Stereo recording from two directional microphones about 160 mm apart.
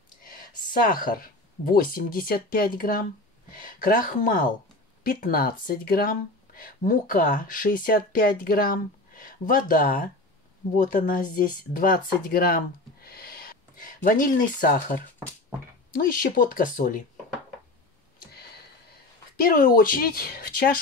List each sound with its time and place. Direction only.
0.7 s speech: 60° left (ahead or behind)
16.0 s speech: 65° left (ahead or behind)
18.3 s a sound: 80° left; by 20.8 s 65° left (ahead or behind)